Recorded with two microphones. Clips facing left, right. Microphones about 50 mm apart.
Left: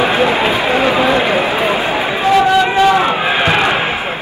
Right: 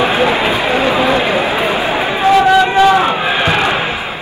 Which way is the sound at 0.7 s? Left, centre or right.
Left.